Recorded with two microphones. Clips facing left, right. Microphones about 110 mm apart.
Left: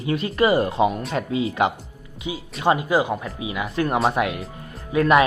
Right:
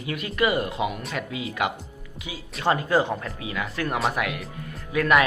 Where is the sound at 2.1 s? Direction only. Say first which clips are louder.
Left 8 dB; 25° left (ahead or behind).